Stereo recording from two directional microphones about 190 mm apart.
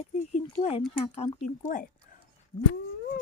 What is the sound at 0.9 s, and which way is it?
Speech, 30° left (ahead or behind).